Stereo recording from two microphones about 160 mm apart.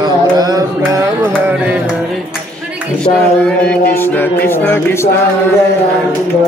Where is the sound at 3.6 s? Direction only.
10° left (ahead or behind).